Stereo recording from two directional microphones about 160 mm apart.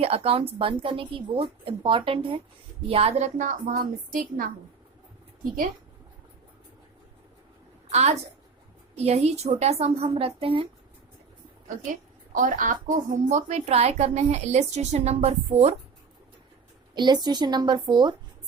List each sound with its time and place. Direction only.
0.0 s a woman's voice: 40° right (ahead or behind); by 4.4 s 60° right (ahead or behind)
7.9 s a woman's voice: 45° right (ahead or behind)
12.3 s speech: 55° right (ahead or behind); by 15.7 s 40° right (ahead or behind)
16.9 s a woman's voice: 25° right (ahead or behind)